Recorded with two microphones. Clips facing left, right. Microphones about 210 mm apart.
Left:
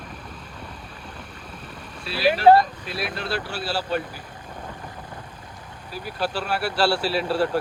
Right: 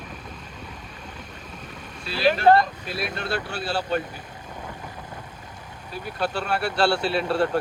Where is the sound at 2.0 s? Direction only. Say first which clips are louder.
Even; 5° left (ahead or behind).